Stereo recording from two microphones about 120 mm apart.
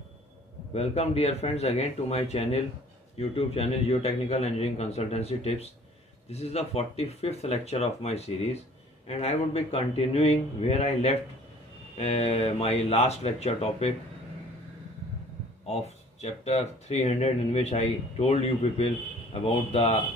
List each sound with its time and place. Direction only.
0.7 s speech: 60° left (ahead or behind)
15.6 s speech: 60° left (ahead or behind)